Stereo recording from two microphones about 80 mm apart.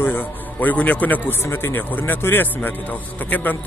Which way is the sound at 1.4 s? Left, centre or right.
Left.